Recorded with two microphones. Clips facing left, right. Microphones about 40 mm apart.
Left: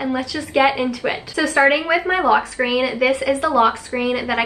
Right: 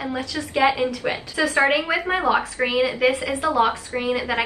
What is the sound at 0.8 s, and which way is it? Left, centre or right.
Speech, left.